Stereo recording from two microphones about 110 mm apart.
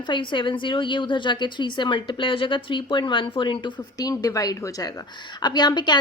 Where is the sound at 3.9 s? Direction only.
30° left (ahead or behind).